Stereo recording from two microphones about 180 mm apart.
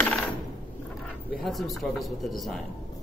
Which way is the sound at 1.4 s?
Centre (ahead or behind).